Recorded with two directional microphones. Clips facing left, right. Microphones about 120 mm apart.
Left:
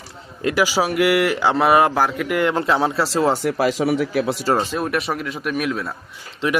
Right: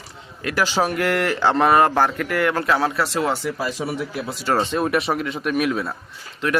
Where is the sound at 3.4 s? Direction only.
75° left (ahead or behind).